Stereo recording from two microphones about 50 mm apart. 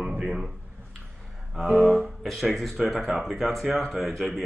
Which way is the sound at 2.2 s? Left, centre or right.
Centre.